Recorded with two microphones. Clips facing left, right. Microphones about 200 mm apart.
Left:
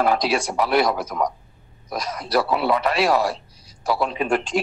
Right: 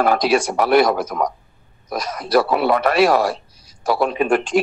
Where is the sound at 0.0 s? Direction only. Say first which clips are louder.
Right 4 dB; 55° right (ahead or behind).